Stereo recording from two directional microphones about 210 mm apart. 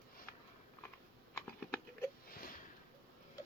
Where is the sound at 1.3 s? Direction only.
15° left (ahead or behind).